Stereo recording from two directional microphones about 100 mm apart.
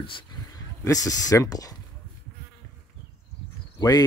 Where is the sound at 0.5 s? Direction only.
35° left (ahead or behind).